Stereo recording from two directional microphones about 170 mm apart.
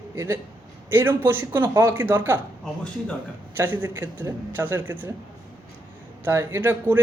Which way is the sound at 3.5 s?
10° right (ahead or behind).